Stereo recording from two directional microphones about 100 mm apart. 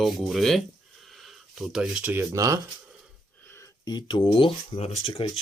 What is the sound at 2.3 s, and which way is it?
Speech, 35° right (ahead or behind).